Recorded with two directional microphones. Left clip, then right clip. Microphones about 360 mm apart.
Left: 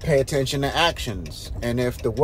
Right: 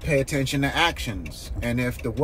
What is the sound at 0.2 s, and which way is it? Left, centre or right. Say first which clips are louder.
A man's voice: left 2 dB; centre.